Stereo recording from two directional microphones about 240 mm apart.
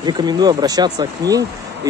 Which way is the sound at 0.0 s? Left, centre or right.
Centre.